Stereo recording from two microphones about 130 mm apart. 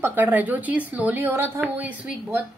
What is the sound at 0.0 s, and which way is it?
A woman's voice, 15° right (ahead or behind).